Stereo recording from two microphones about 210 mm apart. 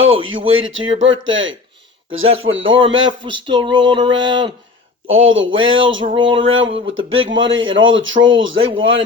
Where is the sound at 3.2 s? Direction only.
25° right (ahead or behind).